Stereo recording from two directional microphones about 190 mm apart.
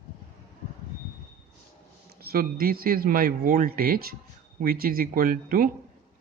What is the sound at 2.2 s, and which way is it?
Speech, 50° right (ahead or behind).